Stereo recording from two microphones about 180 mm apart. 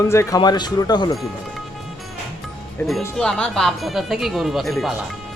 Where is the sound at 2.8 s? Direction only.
10° left (ahead or behind).